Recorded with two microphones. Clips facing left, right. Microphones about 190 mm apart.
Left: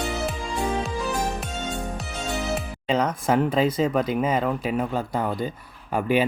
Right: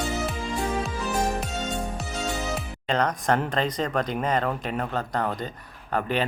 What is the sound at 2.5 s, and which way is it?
Speech, 5° left (ahead or behind).